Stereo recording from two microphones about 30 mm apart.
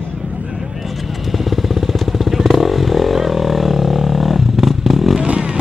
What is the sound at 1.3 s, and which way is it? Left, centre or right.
Motorcycle, centre.